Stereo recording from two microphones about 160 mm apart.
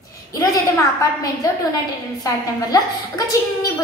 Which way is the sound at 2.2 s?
25° left (ahead or behind).